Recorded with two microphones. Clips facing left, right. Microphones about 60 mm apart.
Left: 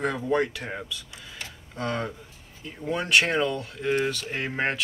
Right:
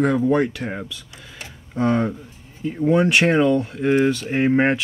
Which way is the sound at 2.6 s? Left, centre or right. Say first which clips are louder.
Right 12 dB; centre.